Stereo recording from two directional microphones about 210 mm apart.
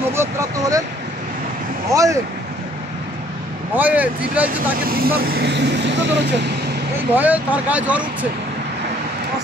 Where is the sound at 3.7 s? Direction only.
10° right (ahead or behind).